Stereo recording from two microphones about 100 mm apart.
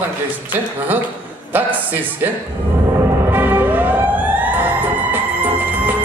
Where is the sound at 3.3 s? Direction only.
20° right (ahead or behind).